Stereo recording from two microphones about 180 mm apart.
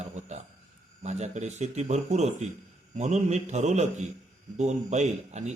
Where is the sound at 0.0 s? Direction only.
40° right (ahead or behind).